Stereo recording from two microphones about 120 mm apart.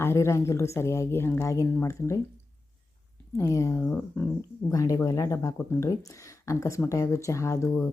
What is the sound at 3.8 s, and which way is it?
Speech, 15° left (ahead or behind).